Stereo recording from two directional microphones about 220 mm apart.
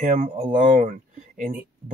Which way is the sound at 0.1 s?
35° right (ahead or behind).